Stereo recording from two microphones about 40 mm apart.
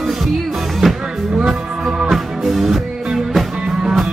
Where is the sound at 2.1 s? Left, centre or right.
Centre.